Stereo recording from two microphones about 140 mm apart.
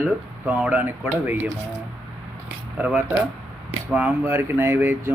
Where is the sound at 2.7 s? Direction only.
5° right (ahead or behind).